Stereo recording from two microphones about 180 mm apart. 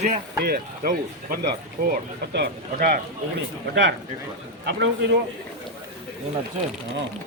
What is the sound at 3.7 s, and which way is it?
Speech, 70° right (ahead or behind).